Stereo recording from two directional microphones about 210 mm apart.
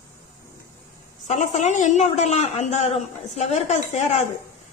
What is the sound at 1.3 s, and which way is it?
A man's voice, 35° left (ahead or behind).